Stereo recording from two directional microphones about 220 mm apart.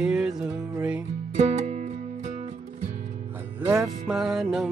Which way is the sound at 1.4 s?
35° right (ahead or behind).